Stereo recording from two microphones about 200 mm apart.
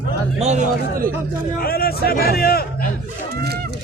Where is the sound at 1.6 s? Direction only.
50° left (ahead or behind).